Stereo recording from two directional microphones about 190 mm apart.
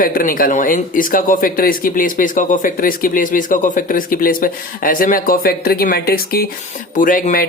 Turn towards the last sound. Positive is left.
turn(degrees=45)  # may be behind; listen again after turning